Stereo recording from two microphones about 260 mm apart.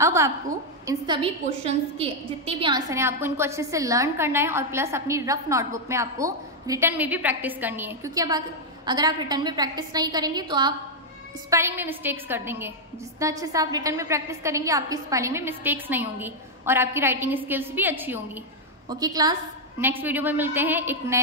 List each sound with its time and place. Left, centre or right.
0.0 s a woman's voice: centre